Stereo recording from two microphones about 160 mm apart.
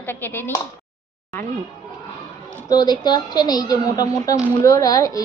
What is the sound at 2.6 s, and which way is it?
A woman's voice, 25° left (ahead or behind).